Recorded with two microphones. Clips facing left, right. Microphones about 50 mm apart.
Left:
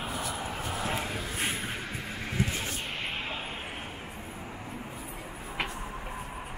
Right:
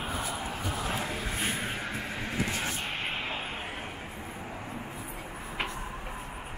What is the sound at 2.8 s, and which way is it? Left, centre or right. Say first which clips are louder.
Vehicle: right 1 dB; right.